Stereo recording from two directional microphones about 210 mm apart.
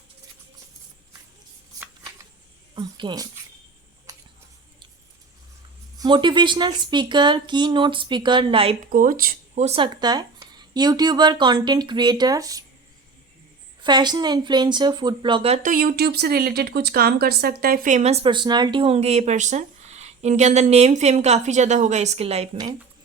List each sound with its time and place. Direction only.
1.7 s shuffling cards: 15° right (ahead or behind)
2.7 s speech: 20° right (ahead or behind)
6.0 s speech: 20° right (ahead or behind)
8.9 s speech: 40° right (ahead or behind); by 12.6 s 15° right (ahead or behind)
13.8 s speech: 20° right (ahead or behind)